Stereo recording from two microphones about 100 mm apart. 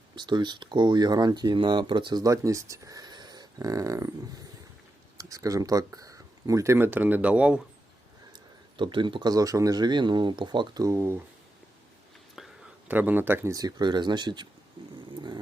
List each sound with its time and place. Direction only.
0.2 s speech: 50° right (ahead or behind)
2.2 s speech: 30° right (ahead or behind)
5.1 s speech: 35° right (ahead or behind)
6.7 s speech: 20° right (ahead or behind)
8.8 s speech: 55° right (ahead or behind)
9.3 s speech: 35° right (ahead or behind); by 10.8 s 50° right (ahead or behind)
10.8 s speech: 25° right (ahead or behind)
12.4 s a sound: 5° right (ahead or behind)
12.9 s speech: 15° right (ahead or behind)
13.5 s speech: 40° right (ahead or behind)
15.1 s vehicle: 50° right (ahead or behind)